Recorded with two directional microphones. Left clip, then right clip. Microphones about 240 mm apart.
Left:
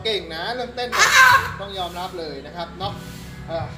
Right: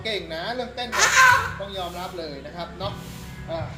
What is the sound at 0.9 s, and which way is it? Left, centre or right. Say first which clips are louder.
Speech: left 4 dB; left.